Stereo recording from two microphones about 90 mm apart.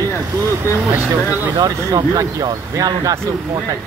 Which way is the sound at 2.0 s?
45° right (ahead or behind).